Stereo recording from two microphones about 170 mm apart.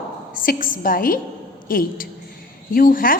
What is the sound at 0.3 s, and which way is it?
A woman's voice, 55° left (ahead or behind).